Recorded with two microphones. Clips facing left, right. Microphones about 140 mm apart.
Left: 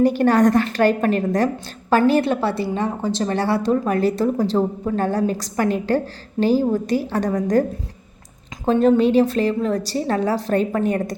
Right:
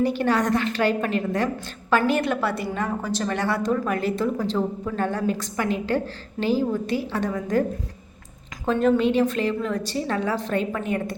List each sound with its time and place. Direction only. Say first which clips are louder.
0.0 s a woman's voice: left 7 dB; 45° left (ahead or behind)
8.6 s a woman's voice: left 4 dB; 35° left (ahead or behind)